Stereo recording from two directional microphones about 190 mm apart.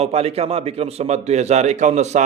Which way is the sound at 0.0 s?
30° right (ahead or behind).